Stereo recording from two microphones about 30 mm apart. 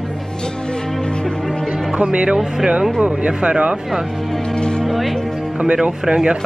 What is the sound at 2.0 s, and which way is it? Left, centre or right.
Speech, right.